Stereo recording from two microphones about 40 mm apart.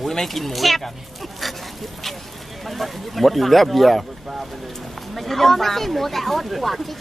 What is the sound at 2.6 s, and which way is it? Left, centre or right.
Speech, centre.